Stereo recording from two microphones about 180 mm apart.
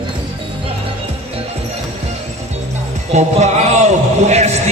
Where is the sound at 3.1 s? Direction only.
40° right (ahead or behind).